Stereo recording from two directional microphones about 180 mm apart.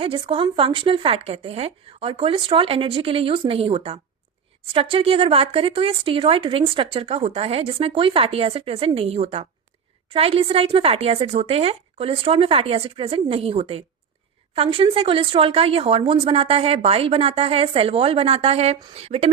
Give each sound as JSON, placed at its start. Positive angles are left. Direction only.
{"t": 0.0, "sound": "speech", "side_deg": -30}